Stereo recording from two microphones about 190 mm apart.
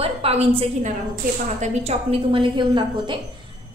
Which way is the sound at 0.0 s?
30° right (ahead or behind).